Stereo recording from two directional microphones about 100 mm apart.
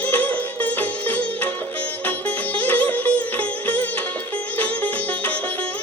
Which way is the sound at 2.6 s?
15° left (ahead or behind).